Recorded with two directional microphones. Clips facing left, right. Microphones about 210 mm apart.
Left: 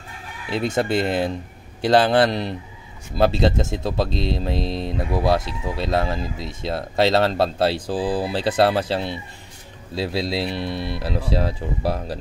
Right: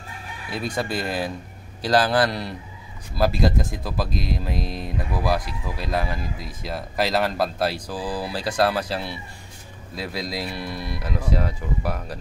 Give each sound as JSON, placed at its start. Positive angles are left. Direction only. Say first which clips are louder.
{"t": 0.5, "sound": "speech", "louder": "left 6 dB", "side_deg": 25}